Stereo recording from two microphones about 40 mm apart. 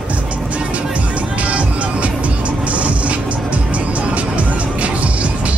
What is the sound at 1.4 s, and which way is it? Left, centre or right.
Music, right.